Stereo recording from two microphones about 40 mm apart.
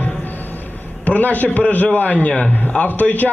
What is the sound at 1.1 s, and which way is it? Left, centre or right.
A man's voice, left.